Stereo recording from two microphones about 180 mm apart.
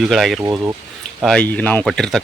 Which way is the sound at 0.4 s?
15° right (ahead or behind).